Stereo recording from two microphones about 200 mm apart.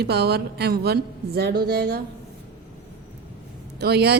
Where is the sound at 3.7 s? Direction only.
55° right (ahead or behind).